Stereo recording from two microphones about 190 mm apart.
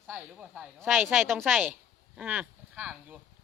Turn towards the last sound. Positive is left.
turn(degrees=-5)  # may be behind; listen again after turning